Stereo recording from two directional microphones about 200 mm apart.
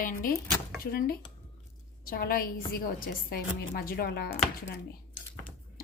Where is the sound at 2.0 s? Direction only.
45° left (ahead or behind).